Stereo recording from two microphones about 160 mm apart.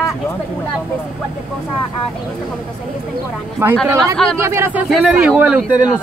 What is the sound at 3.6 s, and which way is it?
Speech, 15° right (ahead or behind).